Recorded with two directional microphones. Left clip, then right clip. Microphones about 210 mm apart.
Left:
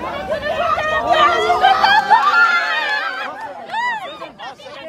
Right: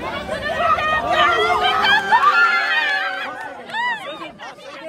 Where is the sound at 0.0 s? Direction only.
55° left (ahead or behind).